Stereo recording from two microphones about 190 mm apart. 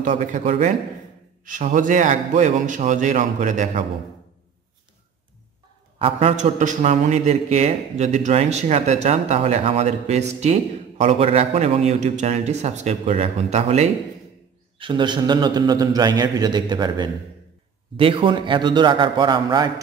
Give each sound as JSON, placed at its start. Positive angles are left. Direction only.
{"t": 0.0, "sound": "a man's voice", "side_deg": -40}
{"t": 5.9, "sound": "a man's voice", "side_deg": -30}